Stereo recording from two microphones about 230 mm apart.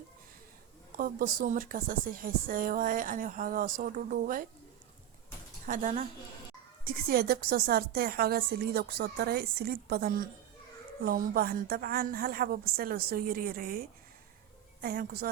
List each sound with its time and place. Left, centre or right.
0.9 s a woman's voice: right
5.6 s a woman's voice: right
14.8 s a woman's voice: right